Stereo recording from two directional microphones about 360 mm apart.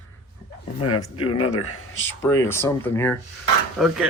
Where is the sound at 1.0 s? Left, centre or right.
Centre.